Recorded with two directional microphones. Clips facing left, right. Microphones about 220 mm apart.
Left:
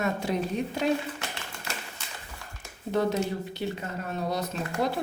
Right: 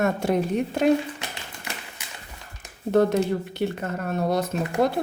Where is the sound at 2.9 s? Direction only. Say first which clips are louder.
Right 6 dB; 50° right (ahead or behind).